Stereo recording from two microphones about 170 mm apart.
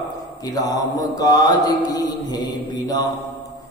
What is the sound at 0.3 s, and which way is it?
Mantra, 20° left (ahead or behind).